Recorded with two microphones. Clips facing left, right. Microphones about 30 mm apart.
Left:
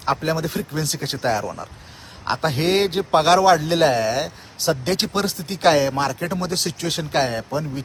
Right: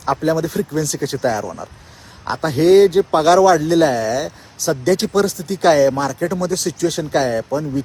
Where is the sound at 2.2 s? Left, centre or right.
Left.